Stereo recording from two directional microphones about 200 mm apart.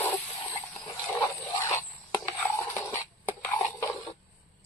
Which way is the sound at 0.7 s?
15° left (ahead or behind).